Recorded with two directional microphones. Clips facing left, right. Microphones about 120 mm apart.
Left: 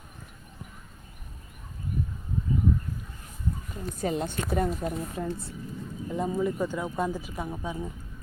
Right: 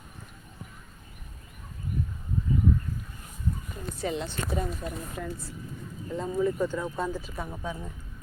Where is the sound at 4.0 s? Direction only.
45° left (ahead or behind).